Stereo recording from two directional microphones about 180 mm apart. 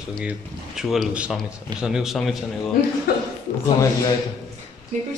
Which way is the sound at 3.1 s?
60° left (ahead or behind).